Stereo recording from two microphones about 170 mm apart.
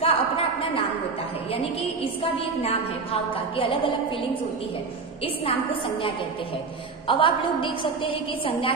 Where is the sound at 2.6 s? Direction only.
35° left (ahead or behind).